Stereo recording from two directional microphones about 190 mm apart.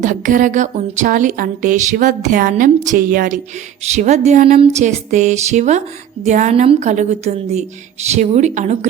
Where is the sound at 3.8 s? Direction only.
35° right (ahead or behind).